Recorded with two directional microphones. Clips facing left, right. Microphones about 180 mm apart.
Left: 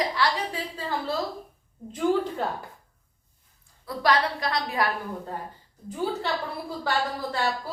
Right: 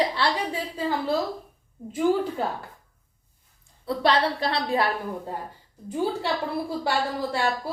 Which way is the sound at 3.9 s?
30° right (ahead or behind).